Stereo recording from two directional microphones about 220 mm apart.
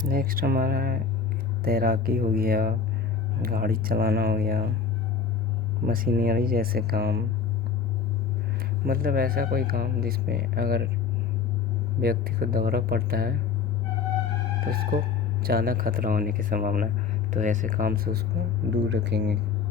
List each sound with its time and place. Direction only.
0.0 s speech: 40° right (ahead or behind)
5.8 s speech: 40° right (ahead or behind)
8.8 s speech: 40° right (ahead or behind)
11.9 s speech: 45° right (ahead or behind)
14.7 s speech: 40° right (ahead or behind)
18.7 s speech: 55° right (ahead or behind)